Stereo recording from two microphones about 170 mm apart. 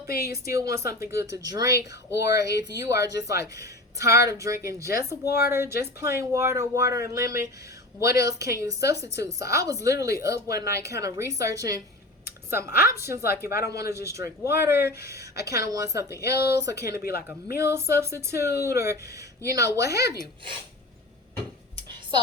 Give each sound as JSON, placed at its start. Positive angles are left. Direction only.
{"t": 0.3, "sound": "a woman's voice", "side_deg": -20}
{"t": 5.2, "sound": "a woman's voice", "side_deg": 70}
{"t": 5.5, "sound": "a woman's voice", "side_deg": -15}
{"t": 17.0, "sound": "speech", "side_deg": 65}
{"t": 17.2, "sound": "a woman's voice", "side_deg": -15}